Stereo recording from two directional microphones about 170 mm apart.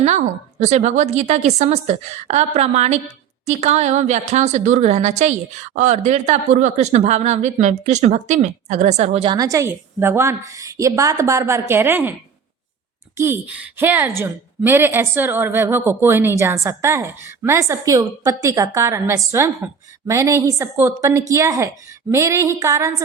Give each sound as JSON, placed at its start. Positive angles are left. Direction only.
{"t": 0.6, "sound": "a woman's voice", "side_deg": -45}
{"t": 9.4, "sound": "a woman's voice", "side_deg": -20}
{"t": 13.1, "sound": "a woman's voice", "side_deg": -15}